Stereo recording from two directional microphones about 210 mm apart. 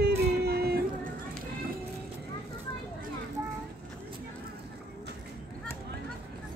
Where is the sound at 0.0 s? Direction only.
50° right (ahead or behind).